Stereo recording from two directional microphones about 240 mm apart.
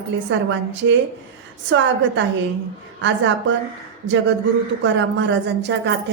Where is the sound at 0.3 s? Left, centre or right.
Right.